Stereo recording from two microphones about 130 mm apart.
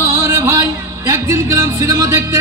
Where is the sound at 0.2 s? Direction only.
20° right (ahead or behind).